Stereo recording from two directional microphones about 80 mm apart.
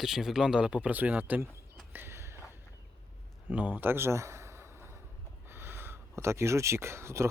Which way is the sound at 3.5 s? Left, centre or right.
Right.